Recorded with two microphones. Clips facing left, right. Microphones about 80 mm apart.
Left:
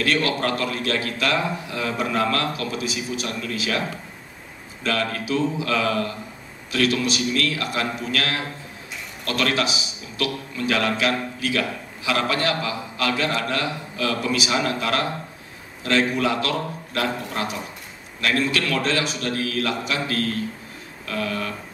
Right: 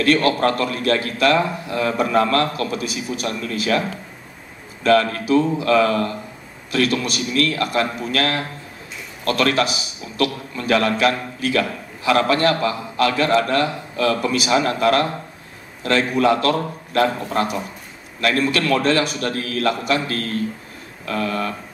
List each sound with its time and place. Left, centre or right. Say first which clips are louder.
0.0 s a man's voice: right 6 dB; right
4.8 s a man's voice: right 8 dB; right